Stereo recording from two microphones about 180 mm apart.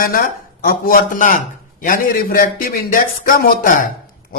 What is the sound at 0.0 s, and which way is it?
A man's voice, 50° left (ahead or behind).